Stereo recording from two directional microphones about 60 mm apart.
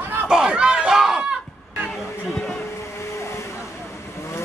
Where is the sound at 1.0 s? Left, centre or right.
Centre.